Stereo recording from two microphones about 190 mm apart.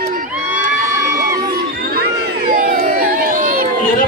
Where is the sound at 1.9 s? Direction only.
55° right (ahead or behind).